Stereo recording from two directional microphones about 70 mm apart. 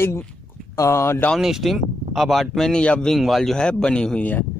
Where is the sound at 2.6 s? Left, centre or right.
Centre.